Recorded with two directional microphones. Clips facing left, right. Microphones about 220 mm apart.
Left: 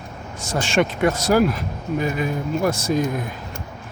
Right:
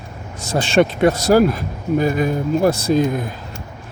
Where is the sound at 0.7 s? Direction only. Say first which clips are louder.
Right 5 dB; 30° right (ahead or behind).